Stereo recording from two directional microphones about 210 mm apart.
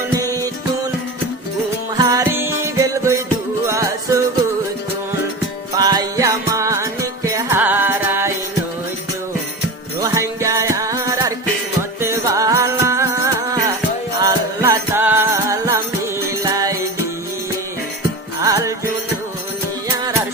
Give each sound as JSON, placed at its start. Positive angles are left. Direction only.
{"t": 2.0, "sound": "music", "side_deg": -15}
{"t": 5.7, "sound": "music", "side_deg": -15}
{"t": 10.0, "sound": "music", "side_deg": -15}
{"t": 18.3, "sound": "music", "side_deg": -15}